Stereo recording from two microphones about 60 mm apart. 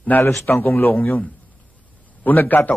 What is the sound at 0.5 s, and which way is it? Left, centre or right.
A man's voice, left.